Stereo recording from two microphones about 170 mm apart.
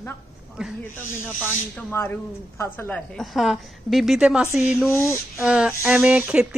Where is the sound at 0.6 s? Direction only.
5° right (ahead or behind).